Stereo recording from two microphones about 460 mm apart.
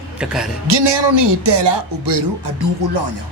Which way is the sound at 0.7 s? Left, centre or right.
Right.